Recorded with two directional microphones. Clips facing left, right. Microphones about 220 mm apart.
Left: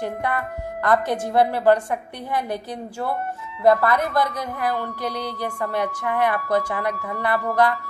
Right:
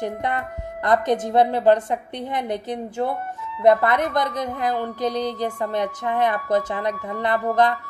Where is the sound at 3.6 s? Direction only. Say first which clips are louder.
Right 1 dB; 20° right (ahead or behind).